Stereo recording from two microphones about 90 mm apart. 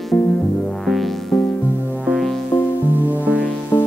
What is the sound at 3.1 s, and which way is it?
Music, 15° right (ahead or behind).